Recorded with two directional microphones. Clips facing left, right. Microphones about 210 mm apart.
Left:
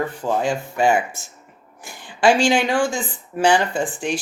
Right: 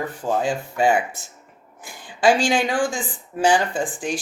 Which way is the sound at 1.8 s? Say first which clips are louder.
Left 1 dB; 25° left (ahead or behind).